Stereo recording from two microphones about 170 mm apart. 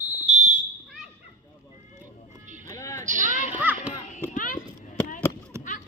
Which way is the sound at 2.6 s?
15° left (ahead or behind).